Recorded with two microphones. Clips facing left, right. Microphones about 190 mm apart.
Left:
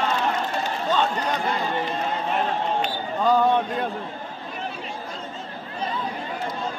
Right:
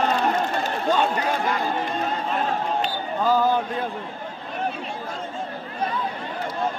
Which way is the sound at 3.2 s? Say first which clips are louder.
Left 1 dB; centre (ahead or behind).